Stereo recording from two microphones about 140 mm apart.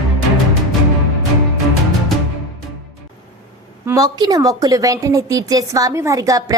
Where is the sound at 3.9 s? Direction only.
25° right (ahead or behind).